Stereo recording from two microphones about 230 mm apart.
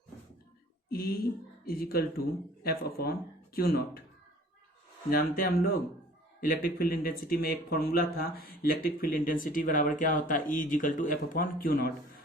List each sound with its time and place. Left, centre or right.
0.9 s a sound: left
1.6 s speech: left
5.1 s speech: left